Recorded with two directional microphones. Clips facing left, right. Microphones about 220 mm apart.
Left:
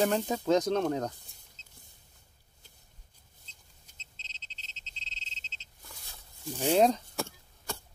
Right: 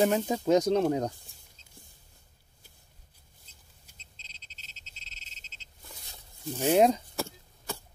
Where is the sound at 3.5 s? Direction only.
10° right (ahead or behind).